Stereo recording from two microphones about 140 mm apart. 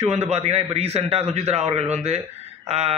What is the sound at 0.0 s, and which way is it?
A man's voice, 50° right (ahead or behind).